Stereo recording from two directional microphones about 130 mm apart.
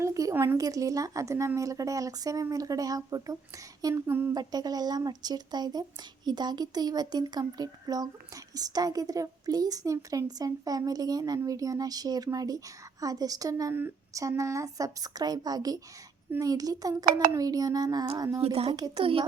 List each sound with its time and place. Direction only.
0.0 s a woman's voice: 25° right (ahead or behind)
4.4 s a woman's voice: 30° right (ahead or behind)
18.3 s speech: 50° right (ahead or behind)